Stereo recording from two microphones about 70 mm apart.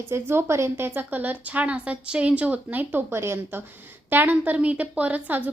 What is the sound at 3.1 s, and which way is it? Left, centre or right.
Speech, right.